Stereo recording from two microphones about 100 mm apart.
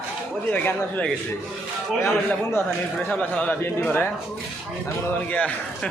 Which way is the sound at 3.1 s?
15° left (ahead or behind).